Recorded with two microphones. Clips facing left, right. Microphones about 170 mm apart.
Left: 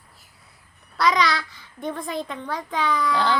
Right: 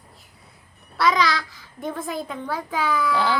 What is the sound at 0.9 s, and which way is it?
A child's voice, centre (ahead or behind).